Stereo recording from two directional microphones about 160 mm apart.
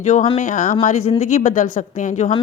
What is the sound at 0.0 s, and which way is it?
A woman's voice, 50° left (ahead or behind).